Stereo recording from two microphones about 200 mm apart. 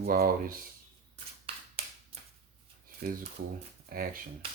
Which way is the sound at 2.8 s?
45° right (ahead or behind).